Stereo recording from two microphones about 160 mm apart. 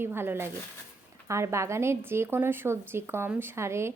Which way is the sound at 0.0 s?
15° right (ahead or behind).